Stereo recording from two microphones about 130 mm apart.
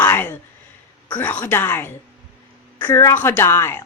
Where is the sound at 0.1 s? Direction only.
15° left (ahead or behind).